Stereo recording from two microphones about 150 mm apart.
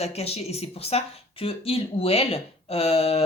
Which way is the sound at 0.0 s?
45° left (ahead or behind).